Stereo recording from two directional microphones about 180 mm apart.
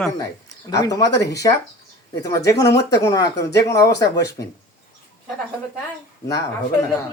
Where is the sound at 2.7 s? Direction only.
70° left (ahead or behind).